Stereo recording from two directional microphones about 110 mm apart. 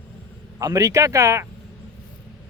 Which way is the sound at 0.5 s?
30° right (ahead or behind).